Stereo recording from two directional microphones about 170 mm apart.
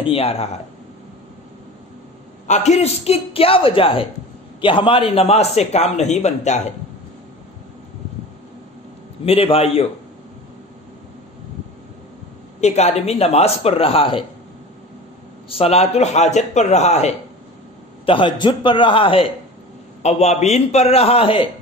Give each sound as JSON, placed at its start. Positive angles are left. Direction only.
{"t": 0.0, "sound": "a man's voice", "side_deg": 35}
{"t": 2.4, "sound": "a man's voice", "side_deg": 40}
{"t": 9.2, "sound": "a man's voice", "side_deg": 35}
{"t": 12.5, "sound": "a man's voice", "side_deg": 40}
{"t": 15.5, "sound": "a man's voice", "side_deg": 35}
{"t": 18.0, "sound": "a man's voice", "side_deg": 30}